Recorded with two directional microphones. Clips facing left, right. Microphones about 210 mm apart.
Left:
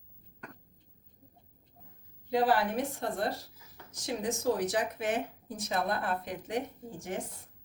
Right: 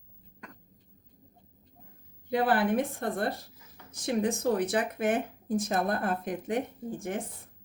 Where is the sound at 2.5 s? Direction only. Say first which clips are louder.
Right 3 dB; 55° right (ahead or behind).